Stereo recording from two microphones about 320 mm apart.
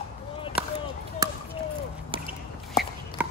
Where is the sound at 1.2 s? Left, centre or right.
Centre.